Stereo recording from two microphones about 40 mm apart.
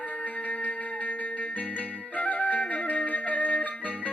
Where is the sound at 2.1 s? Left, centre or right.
Left.